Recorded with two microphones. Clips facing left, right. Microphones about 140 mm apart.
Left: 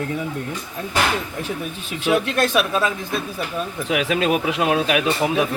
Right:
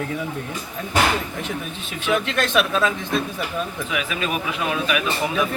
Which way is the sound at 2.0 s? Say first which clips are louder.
Left 3 dB; 10° left (ahead or behind).